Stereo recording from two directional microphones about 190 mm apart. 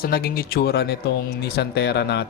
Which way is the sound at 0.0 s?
50° left (ahead or behind).